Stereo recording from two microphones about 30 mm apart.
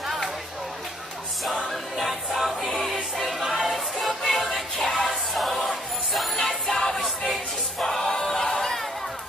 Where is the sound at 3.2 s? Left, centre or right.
Centre.